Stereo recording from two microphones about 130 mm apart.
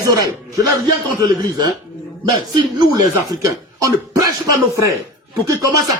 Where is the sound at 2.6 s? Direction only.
30° right (ahead or behind).